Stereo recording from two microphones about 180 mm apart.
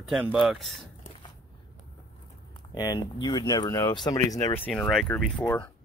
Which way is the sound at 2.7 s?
20° left (ahead or behind).